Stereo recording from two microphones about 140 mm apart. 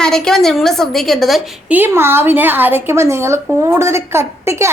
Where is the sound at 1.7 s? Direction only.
15° right (ahead or behind).